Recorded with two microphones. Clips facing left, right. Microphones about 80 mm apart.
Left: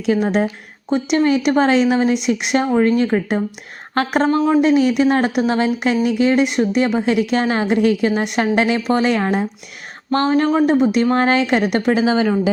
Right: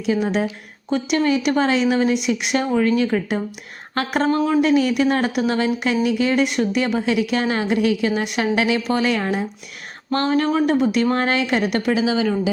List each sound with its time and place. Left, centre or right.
0.1 s a woman's voice: left
0.9 s a woman's voice: left